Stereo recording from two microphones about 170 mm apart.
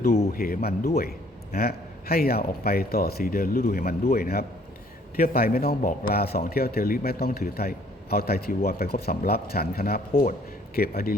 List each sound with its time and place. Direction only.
0.3 s speech: 60° left (ahead or behind)